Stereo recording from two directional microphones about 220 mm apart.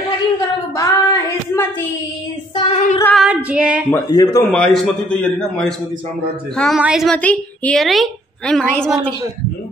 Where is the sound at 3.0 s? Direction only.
5° left (ahead or behind).